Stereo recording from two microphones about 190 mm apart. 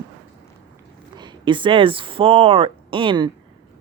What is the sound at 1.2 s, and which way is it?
Speech, 25° right (ahead or behind).